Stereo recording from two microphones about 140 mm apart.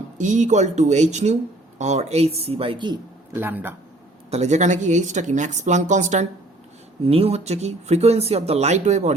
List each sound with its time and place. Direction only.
0.2 s speech: 60° right (ahead or behind); by 3.0 s 35° right (ahead or behind)
3.3 s speech: 15° right (ahead or behind)
4.3 s speech: 55° right (ahead or behind)
7.0 s speech: 45° right (ahead or behind)